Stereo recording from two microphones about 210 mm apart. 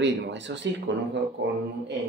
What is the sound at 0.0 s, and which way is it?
Speech, 60° right (ahead or behind).